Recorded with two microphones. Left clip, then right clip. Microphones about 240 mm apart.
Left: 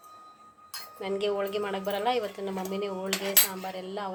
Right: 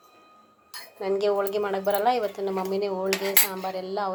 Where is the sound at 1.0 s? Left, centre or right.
Centre.